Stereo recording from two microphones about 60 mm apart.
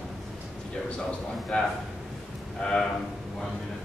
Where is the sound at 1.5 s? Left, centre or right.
Centre.